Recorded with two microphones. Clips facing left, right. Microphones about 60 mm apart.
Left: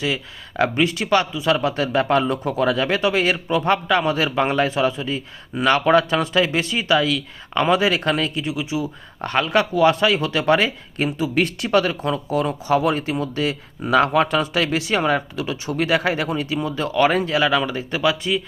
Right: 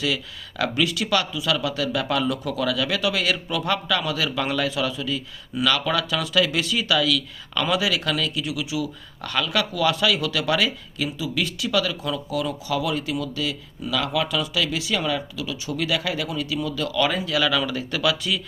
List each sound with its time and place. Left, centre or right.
0.0 s speech: left